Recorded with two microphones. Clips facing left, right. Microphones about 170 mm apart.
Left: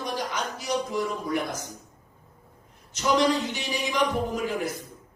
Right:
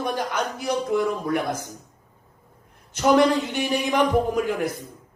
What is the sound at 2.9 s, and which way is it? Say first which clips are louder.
A man's voice: right 5 dB; 55° right (ahead or behind).